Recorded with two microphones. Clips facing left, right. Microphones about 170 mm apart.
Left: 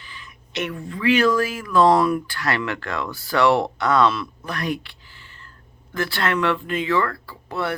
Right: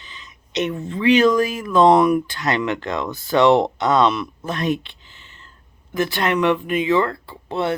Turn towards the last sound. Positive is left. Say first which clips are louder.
# right 4 dB
turn(degrees=-25)  # may be behind; listen again after turning